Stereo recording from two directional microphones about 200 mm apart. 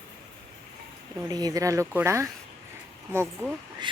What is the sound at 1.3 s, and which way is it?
Speech, 20° right (ahead or behind).